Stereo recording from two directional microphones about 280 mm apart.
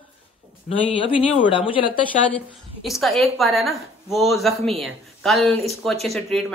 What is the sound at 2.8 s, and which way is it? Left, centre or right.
Speech, centre.